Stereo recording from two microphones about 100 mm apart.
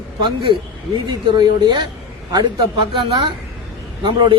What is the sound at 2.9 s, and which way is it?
A man's voice, 55° right (ahead or behind).